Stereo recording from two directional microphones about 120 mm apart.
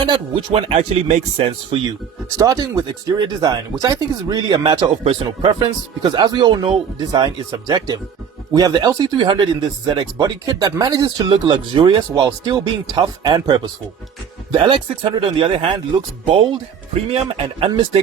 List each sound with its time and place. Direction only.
0.0 s speech: 50° right (ahead or behind); by 1.5 s 65° right (ahead or behind)
2.4 s speech: 30° right (ahead or behind)
5.0 s speech: 45° right (ahead or behind)
9.1 s speech: 45° right (ahead or behind)
12.1 s speech: 30° right (ahead or behind); by 18.0 s 50° right (ahead or behind)